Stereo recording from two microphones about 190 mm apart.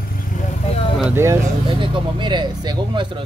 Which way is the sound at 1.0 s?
10° right (ahead or behind).